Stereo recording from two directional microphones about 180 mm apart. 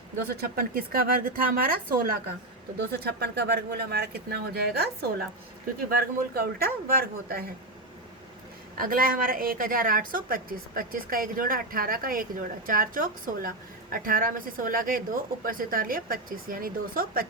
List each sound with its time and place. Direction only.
0.4 s speech: 55° right (ahead or behind)
2.7 s speech: 65° right (ahead or behind)
6.4 s speech: 55° right (ahead or behind)
8.8 s a woman's voice: 50° right (ahead or behind)